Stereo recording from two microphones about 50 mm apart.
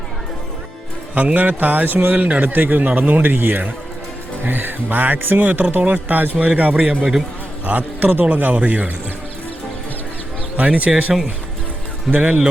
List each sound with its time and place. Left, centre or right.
1.1 s a man's voice: right
7.0 s speech: centre
7.6 s a man's voice: right
10.6 s speech: right
12.1 s a man's voice: right